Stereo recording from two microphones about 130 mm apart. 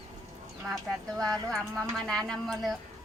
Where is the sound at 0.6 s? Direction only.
20° right (ahead or behind).